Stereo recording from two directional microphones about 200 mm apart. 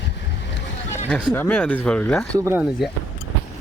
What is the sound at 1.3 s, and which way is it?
Speech, 10° left (ahead or behind).